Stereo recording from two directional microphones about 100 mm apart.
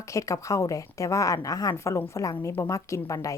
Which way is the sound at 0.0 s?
30° left (ahead or behind).